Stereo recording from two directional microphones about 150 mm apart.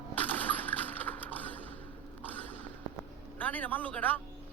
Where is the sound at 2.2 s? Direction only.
10° left (ahead or behind).